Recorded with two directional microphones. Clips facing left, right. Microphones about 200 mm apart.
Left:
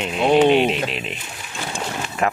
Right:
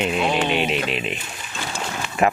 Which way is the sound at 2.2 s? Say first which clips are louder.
Right 3 dB; 10° right (ahead or behind).